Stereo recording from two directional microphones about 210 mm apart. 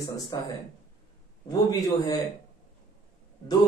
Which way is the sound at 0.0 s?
20° left (ahead or behind).